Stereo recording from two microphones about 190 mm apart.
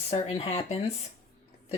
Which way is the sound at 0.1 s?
35° left (ahead or behind).